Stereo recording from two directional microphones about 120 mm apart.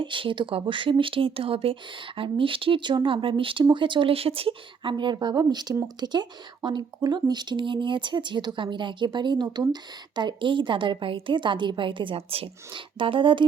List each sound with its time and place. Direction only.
0.0 s speech: 45° right (ahead or behind)